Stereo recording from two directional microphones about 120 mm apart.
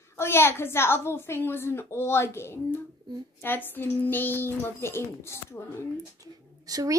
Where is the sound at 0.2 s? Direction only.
20° left (ahead or behind).